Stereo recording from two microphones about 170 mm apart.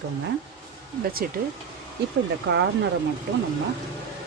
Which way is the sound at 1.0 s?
60° right (ahead or behind).